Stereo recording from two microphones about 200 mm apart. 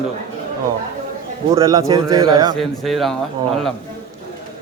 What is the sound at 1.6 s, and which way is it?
Speech, 15° right (ahead or behind).